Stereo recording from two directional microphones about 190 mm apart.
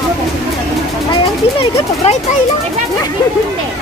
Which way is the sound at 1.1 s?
30° left (ahead or behind).